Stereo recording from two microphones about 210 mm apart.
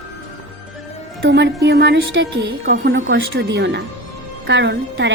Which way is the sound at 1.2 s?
55° right (ahead or behind).